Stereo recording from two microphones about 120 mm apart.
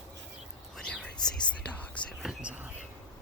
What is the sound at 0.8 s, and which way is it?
Whispering, 5° left (ahead or behind).